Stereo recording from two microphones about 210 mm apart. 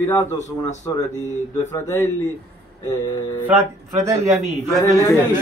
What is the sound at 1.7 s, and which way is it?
Speech, 15° left (ahead or behind).